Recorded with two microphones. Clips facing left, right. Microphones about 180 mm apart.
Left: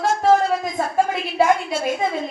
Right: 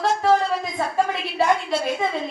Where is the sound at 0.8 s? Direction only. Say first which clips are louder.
Left 1 dB; 45° left (ahead or behind).